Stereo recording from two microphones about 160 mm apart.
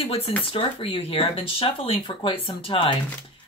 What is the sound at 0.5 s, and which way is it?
Speech, 35° left (ahead or behind).